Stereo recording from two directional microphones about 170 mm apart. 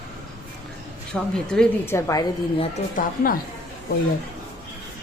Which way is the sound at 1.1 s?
5° left (ahead or behind).